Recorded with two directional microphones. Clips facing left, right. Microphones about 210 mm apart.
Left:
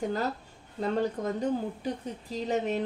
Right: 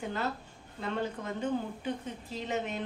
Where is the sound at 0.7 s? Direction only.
40° left (ahead or behind).